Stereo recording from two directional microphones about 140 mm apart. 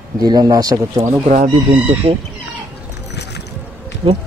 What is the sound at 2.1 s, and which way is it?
Speech, 45° right (ahead or behind).